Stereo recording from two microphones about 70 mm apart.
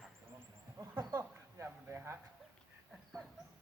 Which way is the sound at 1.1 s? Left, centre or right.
Right.